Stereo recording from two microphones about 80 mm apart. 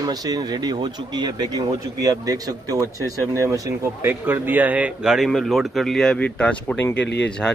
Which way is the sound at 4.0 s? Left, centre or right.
Right.